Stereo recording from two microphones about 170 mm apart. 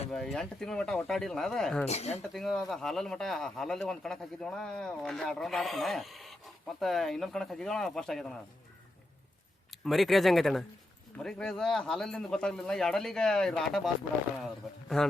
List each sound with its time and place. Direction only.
0.1 s speech: 5° left (ahead or behind)
1.9 s speech: 40° left (ahead or behind)
2.3 s speech: centre (ahead or behind)
9.8 s speech: centre (ahead or behind)
14.9 s speech: 5° left (ahead or behind)